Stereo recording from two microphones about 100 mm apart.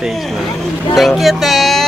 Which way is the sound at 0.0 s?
Centre (ahead or behind).